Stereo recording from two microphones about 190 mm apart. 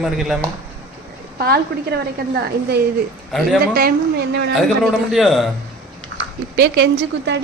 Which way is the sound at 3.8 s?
55° right (ahead or behind).